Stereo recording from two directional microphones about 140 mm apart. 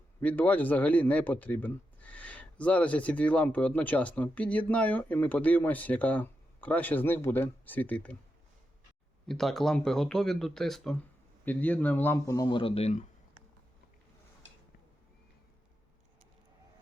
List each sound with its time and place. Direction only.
0.2 s a man's voice: 10° left (ahead or behind)
9.2 s a man's voice: centre (ahead or behind)
12.2 s speech: 25° left (ahead or behind); by 13.4 s 55° left (ahead or behind)